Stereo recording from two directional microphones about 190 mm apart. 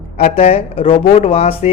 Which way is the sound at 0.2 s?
30° left (ahead or behind).